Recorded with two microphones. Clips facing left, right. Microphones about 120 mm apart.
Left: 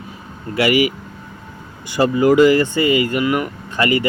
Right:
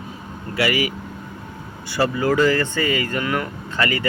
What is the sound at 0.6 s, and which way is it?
Speech, 15° left (ahead or behind).